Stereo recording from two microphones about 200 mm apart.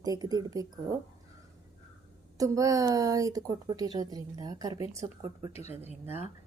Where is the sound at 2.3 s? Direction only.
15° right (ahead or behind).